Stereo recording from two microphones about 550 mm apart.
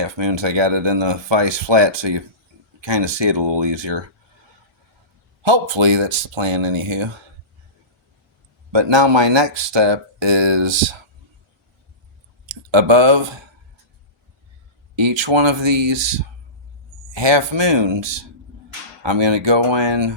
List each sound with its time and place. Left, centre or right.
0.0 s speech: right
5.4 s speech: right
8.7 s speech: right
12.7 s speech: right
14.9 s speech: right
17.2 s speech: right